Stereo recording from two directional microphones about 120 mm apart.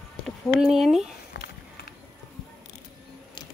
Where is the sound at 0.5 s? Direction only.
Centre (ahead or behind).